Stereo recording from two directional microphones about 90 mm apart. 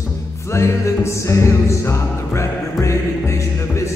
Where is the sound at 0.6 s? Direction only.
30° left (ahead or behind).